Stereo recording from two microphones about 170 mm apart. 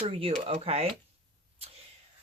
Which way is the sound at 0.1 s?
35° right (ahead or behind).